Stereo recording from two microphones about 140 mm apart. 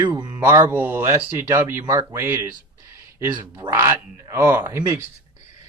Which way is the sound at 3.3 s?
30° right (ahead or behind).